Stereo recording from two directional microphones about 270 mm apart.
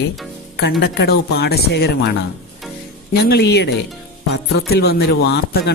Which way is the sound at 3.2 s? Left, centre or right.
Left.